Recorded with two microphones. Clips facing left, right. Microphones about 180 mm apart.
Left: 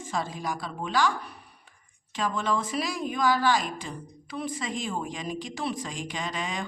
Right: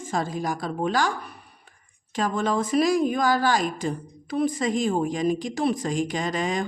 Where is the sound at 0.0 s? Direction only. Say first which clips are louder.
Right 4 dB; 45° right (ahead or behind).